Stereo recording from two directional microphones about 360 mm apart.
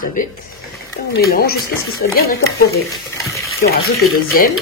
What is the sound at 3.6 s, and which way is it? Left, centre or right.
Speech, left.